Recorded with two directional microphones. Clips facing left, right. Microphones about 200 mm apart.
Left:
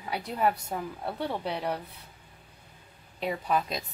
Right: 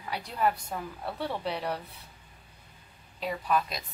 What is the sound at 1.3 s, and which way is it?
Speech, 15° left (ahead or behind).